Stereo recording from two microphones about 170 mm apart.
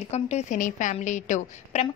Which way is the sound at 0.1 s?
40° left (ahead or behind).